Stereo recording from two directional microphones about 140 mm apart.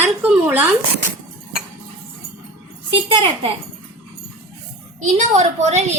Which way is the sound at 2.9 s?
40° right (ahead or behind).